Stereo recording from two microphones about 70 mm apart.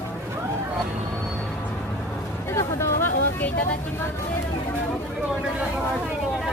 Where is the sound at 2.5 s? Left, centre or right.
Left.